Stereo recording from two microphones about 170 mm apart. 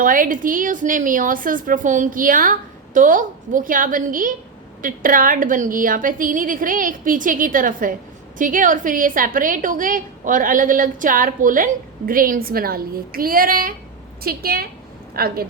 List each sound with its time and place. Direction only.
0.0 s a woman's voice: 55° right (ahead or behind)